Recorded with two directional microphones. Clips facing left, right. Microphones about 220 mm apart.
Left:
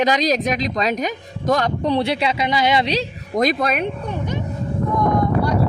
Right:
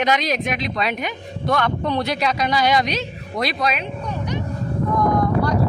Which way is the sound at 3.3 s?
50° left (ahead or behind).